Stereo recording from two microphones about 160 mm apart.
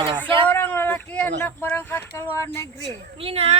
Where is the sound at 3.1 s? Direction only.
40° right (ahead or behind).